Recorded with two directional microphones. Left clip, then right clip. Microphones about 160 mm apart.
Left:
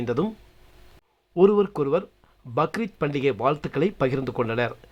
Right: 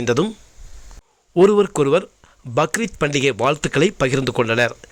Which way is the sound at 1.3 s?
20° right (ahead or behind).